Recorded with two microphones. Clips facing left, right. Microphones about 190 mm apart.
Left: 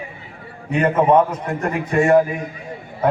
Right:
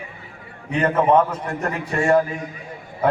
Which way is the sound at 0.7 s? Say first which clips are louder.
Left 2 dB; 10° left (ahead or behind).